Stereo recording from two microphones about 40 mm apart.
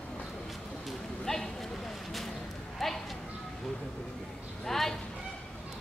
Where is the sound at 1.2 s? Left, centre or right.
Centre.